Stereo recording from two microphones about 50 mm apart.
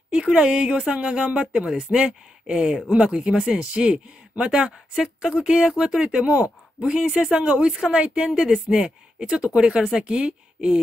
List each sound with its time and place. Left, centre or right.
0.1 s a woman's voice: centre